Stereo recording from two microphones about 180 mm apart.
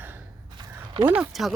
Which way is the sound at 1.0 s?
5° right (ahead or behind).